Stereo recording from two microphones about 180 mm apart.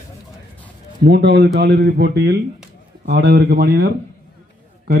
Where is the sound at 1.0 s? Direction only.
70° right (ahead or behind).